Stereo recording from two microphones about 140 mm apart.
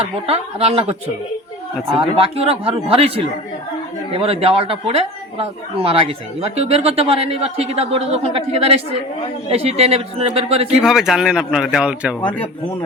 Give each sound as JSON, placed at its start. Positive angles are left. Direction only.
{"t": 0.0, "sound": "speech", "side_deg": -45}
{"t": 2.0, "sound": "speech", "side_deg": -40}
{"t": 10.8, "sound": "speech", "side_deg": 0}